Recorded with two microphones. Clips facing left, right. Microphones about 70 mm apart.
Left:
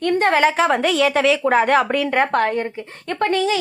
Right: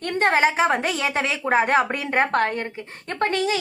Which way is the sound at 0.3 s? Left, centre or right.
Left.